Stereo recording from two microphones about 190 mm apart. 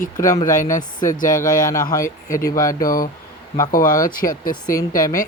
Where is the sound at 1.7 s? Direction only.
15° left (ahead or behind).